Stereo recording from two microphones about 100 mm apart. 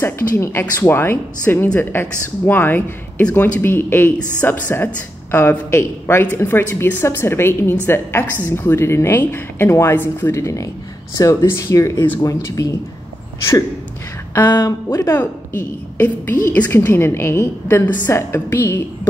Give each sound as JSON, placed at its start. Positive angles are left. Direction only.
{"t": 0.0, "sound": "speech", "side_deg": 25}
{"t": 14.4, "sound": "speech", "side_deg": 45}
{"t": 15.0, "sound": "speech", "side_deg": 25}